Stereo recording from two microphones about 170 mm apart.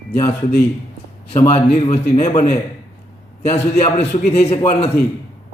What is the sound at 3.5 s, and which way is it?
A man's voice, 35° left (ahead or behind).